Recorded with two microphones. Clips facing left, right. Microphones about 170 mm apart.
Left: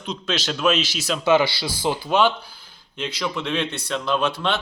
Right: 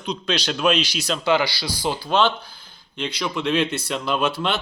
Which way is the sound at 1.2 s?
20° left (ahead or behind).